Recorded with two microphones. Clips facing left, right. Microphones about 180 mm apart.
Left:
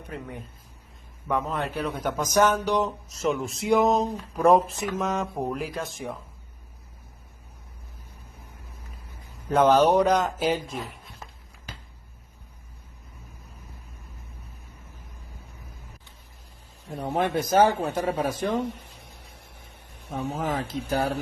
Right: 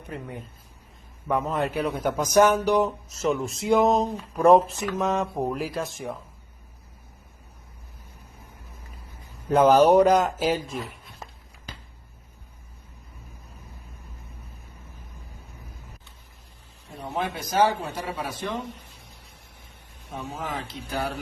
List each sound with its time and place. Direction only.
1.3 s a man's voice: 5° right (ahead or behind)
9.5 s speech: 5° right (ahead or behind)
17.2 s speech: 50° left (ahead or behind)
20.1 s speech: 60° left (ahead or behind)
20.5 s speech: 45° left (ahead or behind)